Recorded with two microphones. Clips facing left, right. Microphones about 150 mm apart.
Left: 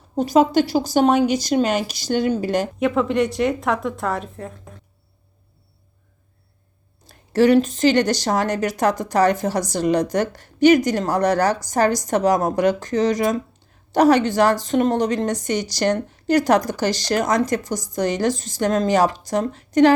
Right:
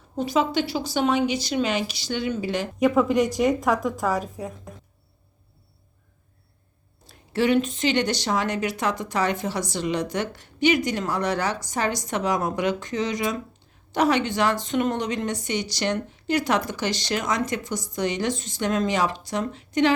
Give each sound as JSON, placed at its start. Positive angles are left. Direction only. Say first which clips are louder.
{"t": 0.2, "sound": "a woman's voice", "louder": "left 7 dB", "side_deg": 40}
{"t": 2.7, "sound": "a woman's voice", "louder": "right 3 dB", "side_deg": 0}
{"t": 7.1, "sound": "a woman's voice", "louder": "left 6 dB", "side_deg": 40}